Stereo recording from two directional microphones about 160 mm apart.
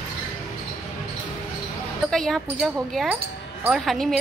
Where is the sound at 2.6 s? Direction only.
5° right (ahead or behind).